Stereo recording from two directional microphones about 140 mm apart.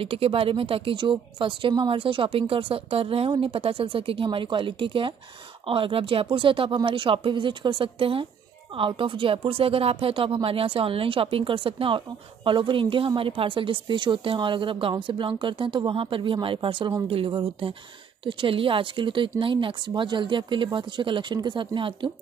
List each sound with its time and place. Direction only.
0.0 s a woman's voice: 40° right (ahead or behind)